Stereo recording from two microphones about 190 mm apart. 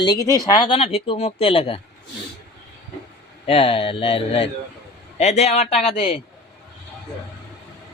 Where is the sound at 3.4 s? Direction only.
30° left (ahead or behind).